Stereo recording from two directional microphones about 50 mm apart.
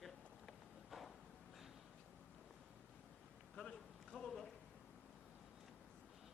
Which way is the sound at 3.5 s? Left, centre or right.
Centre.